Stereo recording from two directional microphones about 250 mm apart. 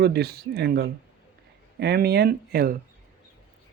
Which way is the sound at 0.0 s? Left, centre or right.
Right.